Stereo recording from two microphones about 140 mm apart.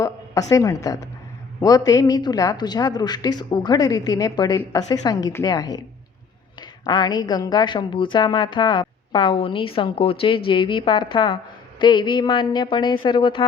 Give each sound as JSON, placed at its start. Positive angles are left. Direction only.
{"t": 0.0, "sound": "a woman's voice", "side_deg": 25}